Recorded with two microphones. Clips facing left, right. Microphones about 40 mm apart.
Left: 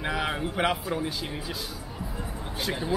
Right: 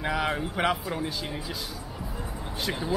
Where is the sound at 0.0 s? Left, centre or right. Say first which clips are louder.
Right 1 dB; centre.